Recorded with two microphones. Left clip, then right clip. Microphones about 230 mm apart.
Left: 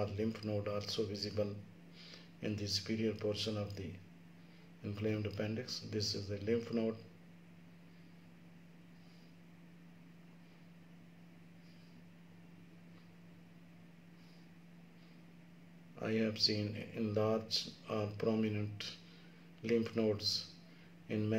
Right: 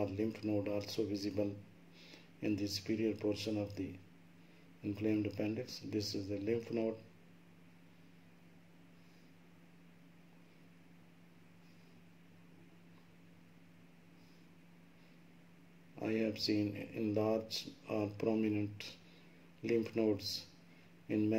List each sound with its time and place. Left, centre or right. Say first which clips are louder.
0.0 s speech: right 1 dB; right
4.8 s speech: right 3 dB; right
16.0 s speech: left 2 dB; right